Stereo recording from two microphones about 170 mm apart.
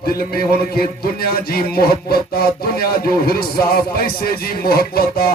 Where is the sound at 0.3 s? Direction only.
65° left (ahead or behind).